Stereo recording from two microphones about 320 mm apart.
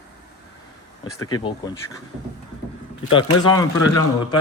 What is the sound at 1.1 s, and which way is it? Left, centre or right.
Speech, centre.